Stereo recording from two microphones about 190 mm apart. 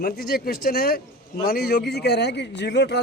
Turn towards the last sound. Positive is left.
turn(degrees=60)  # may be behind; listen again after turning